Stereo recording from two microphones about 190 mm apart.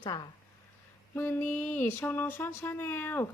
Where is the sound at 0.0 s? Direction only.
25° left (ahead or behind).